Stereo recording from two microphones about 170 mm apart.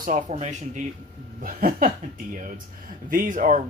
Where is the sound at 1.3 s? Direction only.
55° right (ahead or behind).